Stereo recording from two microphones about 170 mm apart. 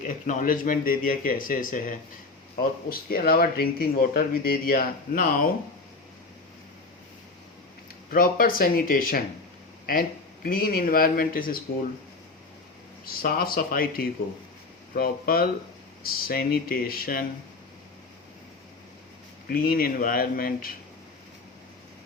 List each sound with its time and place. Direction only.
0.0 s speech: 45° left (ahead or behind)
8.1 s speech: 55° left (ahead or behind)
10.4 s speech: 60° left (ahead or behind)
13.2 s speech: 60° left (ahead or behind)
19.5 s speech: 60° left (ahead or behind)